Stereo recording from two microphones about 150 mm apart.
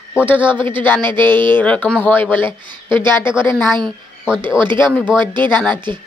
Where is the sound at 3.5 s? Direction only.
5° right (ahead or behind).